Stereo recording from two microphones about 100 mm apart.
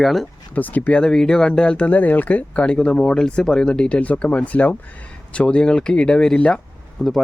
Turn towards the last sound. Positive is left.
turn(degrees=5)  # may be behind; listen again after turning